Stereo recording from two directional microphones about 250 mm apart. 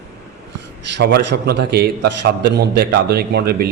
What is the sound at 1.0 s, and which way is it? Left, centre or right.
A man's voice, right.